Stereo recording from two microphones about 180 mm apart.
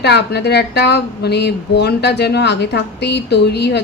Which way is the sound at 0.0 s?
65° left (ahead or behind).